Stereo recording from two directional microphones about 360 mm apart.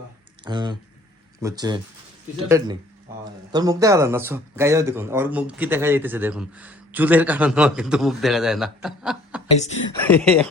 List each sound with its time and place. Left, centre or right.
0.4 s speech: centre
9.5 s a woman's voice: centre
10.0 s speech: centre